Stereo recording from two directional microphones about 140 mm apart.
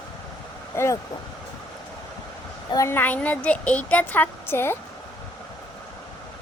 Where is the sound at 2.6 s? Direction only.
20° left (ahead or behind).